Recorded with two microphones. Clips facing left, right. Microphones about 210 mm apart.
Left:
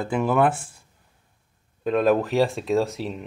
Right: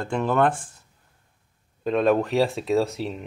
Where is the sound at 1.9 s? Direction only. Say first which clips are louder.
Even; centre (ahead or behind).